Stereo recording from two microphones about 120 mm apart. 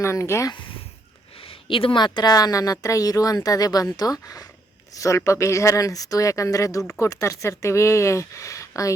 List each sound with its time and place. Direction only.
0.0 s speech: 25° left (ahead or behind)
1.5 s a woman's voice: 50° left (ahead or behind); by 9.0 s 25° left (ahead or behind)